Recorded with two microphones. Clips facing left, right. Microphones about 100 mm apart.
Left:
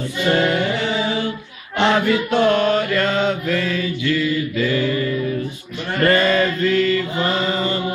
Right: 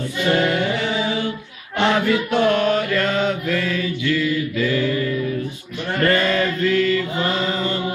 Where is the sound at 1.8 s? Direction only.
25° left (ahead or behind).